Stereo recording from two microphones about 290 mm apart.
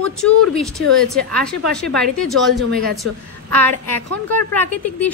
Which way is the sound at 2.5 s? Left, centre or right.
Right.